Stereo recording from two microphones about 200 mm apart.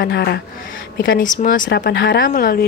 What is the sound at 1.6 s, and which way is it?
Speech, 55° left (ahead or behind).